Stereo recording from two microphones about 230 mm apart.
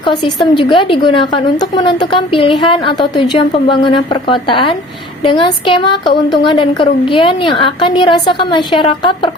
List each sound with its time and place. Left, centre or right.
0.0 s a woman's voice: centre